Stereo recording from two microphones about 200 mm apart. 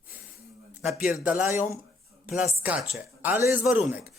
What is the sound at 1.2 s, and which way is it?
Speech, 10° right (ahead or behind).